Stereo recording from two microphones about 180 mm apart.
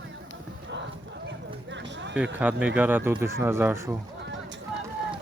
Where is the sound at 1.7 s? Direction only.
80° right.